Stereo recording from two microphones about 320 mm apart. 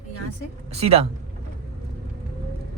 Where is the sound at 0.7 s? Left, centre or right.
Centre.